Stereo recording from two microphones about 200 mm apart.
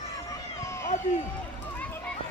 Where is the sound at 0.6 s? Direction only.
15° left (ahead or behind).